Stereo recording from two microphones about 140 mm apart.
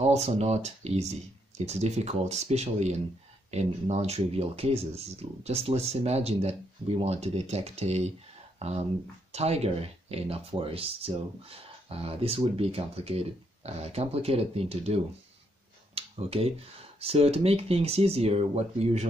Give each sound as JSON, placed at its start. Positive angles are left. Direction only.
{"t": 0.0, "sound": "speech", "side_deg": -50}
{"t": 15.9, "sound": "a sound", "side_deg": -45}
{"t": 17.0, "sound": "speech", "side_deg": -45}